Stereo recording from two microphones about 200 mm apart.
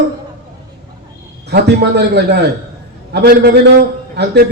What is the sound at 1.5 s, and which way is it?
A man's voice, 55° right (ahead or behind).